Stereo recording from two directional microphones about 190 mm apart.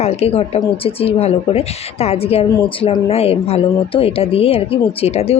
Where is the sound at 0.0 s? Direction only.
30° left (ahead or behind).